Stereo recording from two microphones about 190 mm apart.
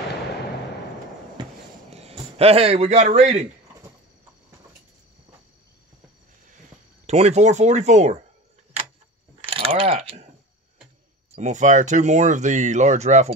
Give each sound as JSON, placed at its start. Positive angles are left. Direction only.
{"t": 1.9, "sound": "a man's voice", "side_deg": -30}
{"t": 7.1, "sound": "speech", "side_deg": -35}
{"t": 9.5, "sound": "coin", "side_deg": -30}
{"t": 11.3, "sound": "speech", "side_deg": -40}